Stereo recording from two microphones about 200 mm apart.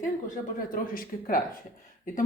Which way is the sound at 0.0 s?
40° left (ahead or behind).